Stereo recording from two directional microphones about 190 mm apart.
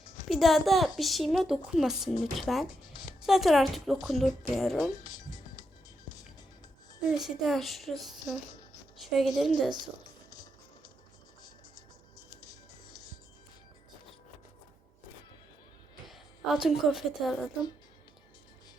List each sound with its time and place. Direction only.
0.3 s a woman's voice: centre (ahead or behind)
2.9 s music: 25° left (ahead or behind)
3.2 s speech: centre (ahead or behind)
5.0 s music: 20° left (ahead or behind)
7.2 s a woman's voice: centre (ahead or behind)
10.2 s music: 20° left (ahead or behind)
16.0 s a woman's voice: centre (ahead or behind)